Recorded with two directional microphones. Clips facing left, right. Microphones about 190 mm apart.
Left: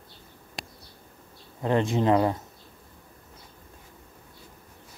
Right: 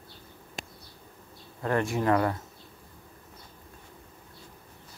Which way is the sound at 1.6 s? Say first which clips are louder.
Left 3 dB; 20° left (ahead or behind).